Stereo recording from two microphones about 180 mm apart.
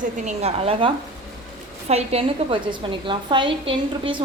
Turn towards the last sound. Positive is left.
turn(degrees=-30)  # may be behind; listen again after turning